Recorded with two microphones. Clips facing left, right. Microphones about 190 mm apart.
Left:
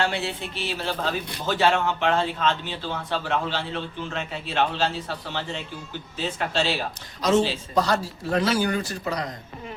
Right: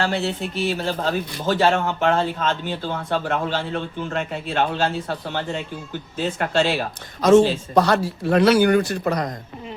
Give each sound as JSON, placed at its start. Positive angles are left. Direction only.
{"t": 0.0, "sound": "a man's voice", "side_deg": -40}